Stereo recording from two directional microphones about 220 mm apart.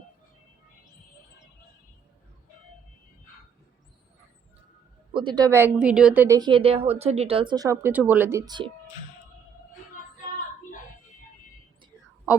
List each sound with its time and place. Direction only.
5.1 s a woman's voice: 20° right (ahead or behind)